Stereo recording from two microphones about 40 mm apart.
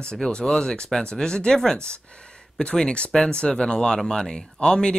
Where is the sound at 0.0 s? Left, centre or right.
Left.